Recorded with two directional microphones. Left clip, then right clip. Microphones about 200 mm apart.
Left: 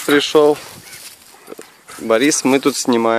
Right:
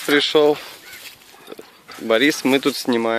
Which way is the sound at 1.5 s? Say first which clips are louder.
Left 3 dB; 5° right (ahead or behind).